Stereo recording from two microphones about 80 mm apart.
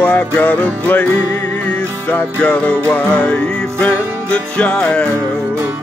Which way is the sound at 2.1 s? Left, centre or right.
Centre.